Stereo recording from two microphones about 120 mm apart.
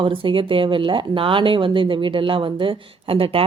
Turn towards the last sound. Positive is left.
turn(degrees=-50)  # may be behind; listen again after turning